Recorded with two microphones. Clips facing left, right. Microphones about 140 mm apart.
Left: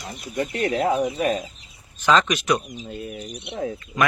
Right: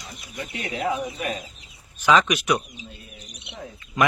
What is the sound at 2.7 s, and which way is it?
Speech, 50° left (ahead or behind).